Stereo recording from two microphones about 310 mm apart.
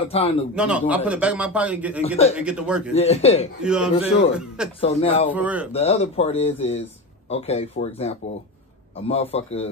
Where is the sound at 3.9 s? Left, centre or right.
Centre.